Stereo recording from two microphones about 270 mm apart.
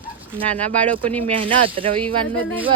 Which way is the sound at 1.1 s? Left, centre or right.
Centre.